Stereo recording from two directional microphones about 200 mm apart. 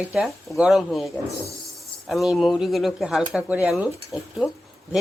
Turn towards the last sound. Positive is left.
turn(degrees=-5)  # may be behind; listen again after turning